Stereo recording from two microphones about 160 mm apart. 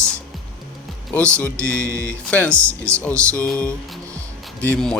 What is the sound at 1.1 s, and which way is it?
Speech, 5° left (ahead or behind).